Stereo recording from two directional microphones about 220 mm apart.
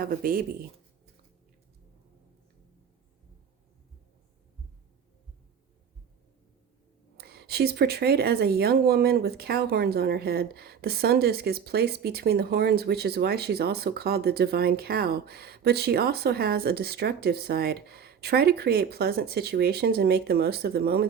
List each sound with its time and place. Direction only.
0.0 s speech: 40° right (ahead or behind)
7.2 s speech: 45° right (ahead or behind)